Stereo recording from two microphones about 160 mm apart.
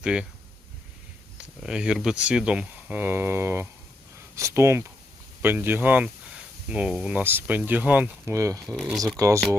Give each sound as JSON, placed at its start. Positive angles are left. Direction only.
{"t": 0.0, "sound": "speech", "side_deg": -5}
{"t": 1.6, "sound": "speech", "side_deg": -5}
{"t": 8.6, "sound": "speech", "side_deg": 0}
{"t": 9.1, "sound": "speech", "side_deg": -20}